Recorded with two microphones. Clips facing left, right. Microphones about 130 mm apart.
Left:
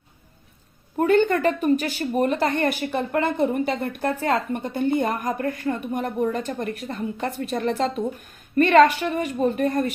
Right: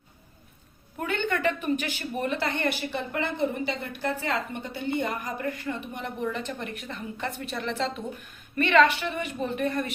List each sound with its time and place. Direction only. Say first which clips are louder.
0.9 s a woman's voice: left 10 dB; 40° left (ahead or behind)